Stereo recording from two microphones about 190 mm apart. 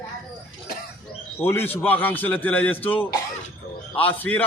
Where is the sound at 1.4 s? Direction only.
10° left (ahead or behind).